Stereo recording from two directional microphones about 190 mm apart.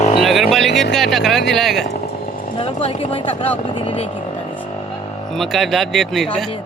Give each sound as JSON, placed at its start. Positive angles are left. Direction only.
{"t": 0.2, "sound": "a sound", "side_deg": 0}
{"t": 0.5, "sound": "music", "side_deg": 0}
{"t": 0.9, "sound": "speech", "side_deg": 0}
{"t": 2.6, "sound": "speech", "side_deg": 30}
{"t": 5.4, "sound": "speech", "side_deg": 0}